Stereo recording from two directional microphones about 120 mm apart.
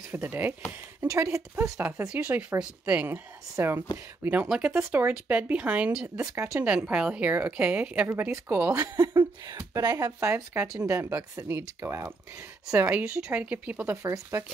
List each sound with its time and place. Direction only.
0.1 s speech: 15° right (ahead or behind)
1.0 s speech: 25° right (ahead or behind); by 6.0 s 10° right (ahead or behind)
6.1 s speech: 20° right (ahead or behind)
6.6 s speech: 10° right (ahead or behind)
9.5 s speech: 30° right (ahead or behind)
10.3 s speech: 15° right (ahead or behind)